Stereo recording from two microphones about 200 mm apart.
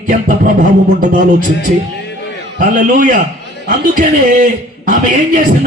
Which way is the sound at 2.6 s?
45° right (ahead or behind).